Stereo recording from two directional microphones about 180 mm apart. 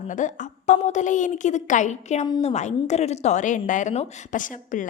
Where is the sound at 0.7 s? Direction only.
45° left (ahead or behind).